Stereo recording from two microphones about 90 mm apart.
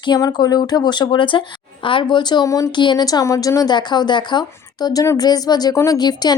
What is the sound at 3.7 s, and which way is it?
Speech, 55° left (ahead or behind).